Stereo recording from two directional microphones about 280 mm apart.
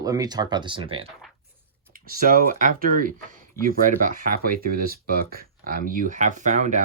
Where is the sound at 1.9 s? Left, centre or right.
Right.